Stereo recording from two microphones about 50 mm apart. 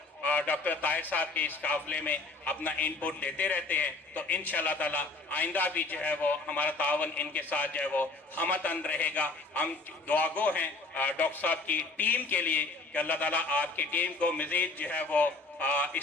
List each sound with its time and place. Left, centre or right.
0.2 s speech: left